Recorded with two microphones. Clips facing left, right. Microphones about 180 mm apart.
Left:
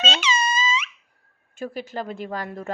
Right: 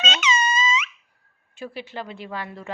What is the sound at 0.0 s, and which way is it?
Squeak, 30° left (ahead or behind).